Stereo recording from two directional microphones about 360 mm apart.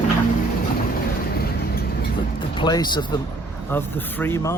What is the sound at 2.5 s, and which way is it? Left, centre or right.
Speech, centre.